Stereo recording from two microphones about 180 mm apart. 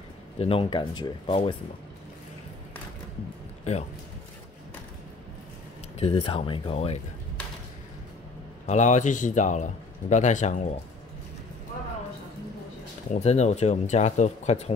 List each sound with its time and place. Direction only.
0.4 s speech: 30° left (ahead or behind)
5.9 s speech: 35° left (ahead or behind)
8.6 s a man's voice: 40° left (ahead or behind)
13.1 s speech: 40° left (ahead or behind)